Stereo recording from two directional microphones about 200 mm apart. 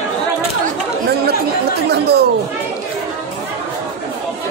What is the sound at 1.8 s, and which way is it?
Chatter, 55° right (ahead or behind).